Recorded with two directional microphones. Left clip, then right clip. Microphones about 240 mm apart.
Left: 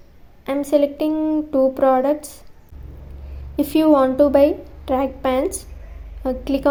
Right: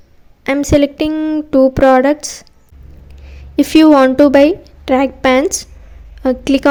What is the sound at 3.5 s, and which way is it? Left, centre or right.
A woman's voice, right.